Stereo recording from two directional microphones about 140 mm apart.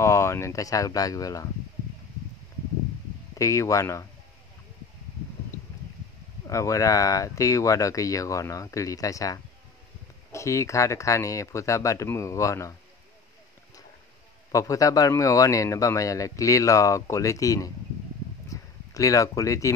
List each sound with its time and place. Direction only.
0.0 s speech: 20° left (ahead or behind)
3.3 s speech: 20° left (ahead or behind)
6.4 s speech: 20° left (ahead or behind)
14.5 s speech: 25° left (ahead or behind)